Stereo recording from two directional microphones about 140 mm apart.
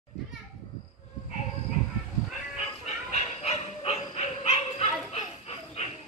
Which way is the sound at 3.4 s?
50° left (ahead or behind).